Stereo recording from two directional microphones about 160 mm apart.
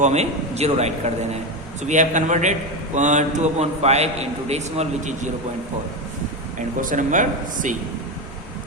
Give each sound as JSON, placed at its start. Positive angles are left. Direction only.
{"t": 0.0, "sound": "a man's voice", "side_deg": -45}
{"t": 6.8, "sound": "a man's voice", "side_deg": -55}